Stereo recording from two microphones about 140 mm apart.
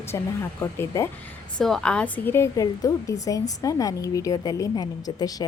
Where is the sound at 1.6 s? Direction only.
5° left (ahead or behind).